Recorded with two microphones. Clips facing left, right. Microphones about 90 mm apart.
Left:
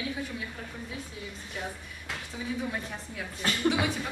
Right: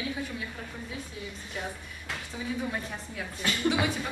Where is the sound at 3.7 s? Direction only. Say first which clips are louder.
Right 1 dB; centre (ahead or behind).